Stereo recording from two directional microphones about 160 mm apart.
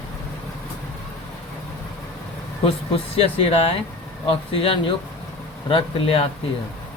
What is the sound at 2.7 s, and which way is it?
Speech, 35° left (ahead or behind).